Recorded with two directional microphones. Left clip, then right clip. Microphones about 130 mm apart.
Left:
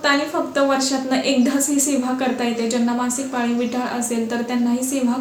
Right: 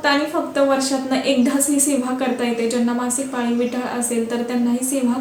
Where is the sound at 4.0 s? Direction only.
25° left (ahead or behind).